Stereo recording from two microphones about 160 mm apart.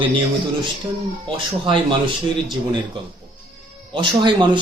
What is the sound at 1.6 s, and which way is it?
Speech, 30° right (ahead or behind).